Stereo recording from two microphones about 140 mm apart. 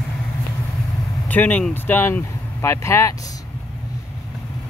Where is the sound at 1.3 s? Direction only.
10° left (ahead or behind).